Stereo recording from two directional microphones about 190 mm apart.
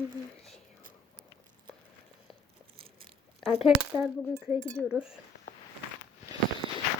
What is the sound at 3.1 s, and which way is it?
Speech, centre (ahead or behind).